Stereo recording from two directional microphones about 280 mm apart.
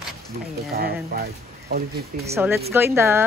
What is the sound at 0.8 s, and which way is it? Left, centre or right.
Speech, right.